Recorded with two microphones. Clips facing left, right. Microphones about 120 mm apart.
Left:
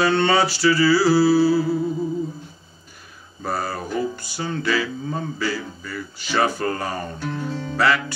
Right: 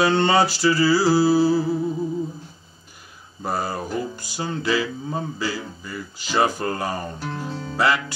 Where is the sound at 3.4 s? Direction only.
15° right (ahead or behind).